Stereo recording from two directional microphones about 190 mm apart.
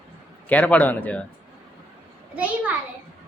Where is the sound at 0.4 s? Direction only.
10° left (ahead or behind).